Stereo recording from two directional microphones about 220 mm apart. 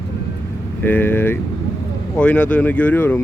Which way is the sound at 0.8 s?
10° left (ahead or behind).